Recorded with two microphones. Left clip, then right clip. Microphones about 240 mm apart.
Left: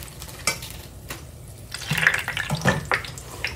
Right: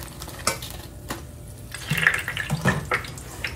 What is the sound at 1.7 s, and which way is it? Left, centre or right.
Water, centre.